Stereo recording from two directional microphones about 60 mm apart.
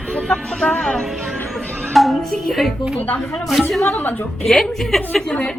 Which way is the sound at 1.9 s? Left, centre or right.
Centre.